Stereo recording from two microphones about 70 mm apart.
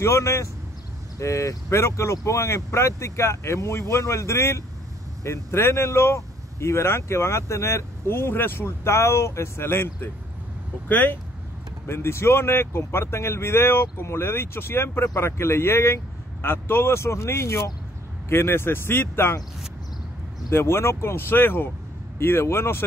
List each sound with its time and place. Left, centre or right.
0.0 s speech: left
10.9 s speech: left
11.9 s speech: left
20.4 s speech: left